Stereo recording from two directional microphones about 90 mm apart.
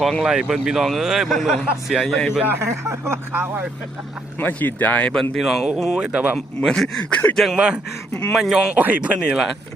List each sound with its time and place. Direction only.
0.0 s speech: centre (ahead or behind)
2.4 s speech: 25° right (ahead or behind)
4.4 s speech: 20° left (ahead or behind)
5.4 s speech: 5° right (ahead or behind)
6.3 s speech: 5° left (ahead or behind)
7.0 s speech: 15° left (ahead or behind)
7.5 s speech: 10° right (ahead or behind)
8.7 s speech: 15° right (ahead or behind)